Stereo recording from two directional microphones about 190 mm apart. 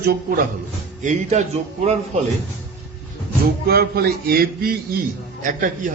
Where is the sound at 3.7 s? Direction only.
55° right (ahead or behind).